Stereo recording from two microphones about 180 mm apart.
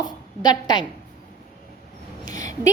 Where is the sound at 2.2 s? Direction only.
20° left (ahead or behind).